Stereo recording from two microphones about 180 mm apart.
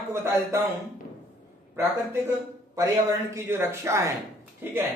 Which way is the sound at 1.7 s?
10° right (ahead or behind).